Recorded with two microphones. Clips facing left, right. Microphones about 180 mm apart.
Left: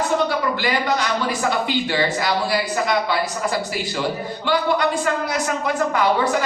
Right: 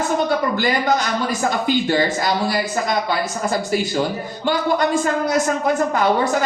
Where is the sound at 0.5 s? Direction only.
45° right (ahead or behind).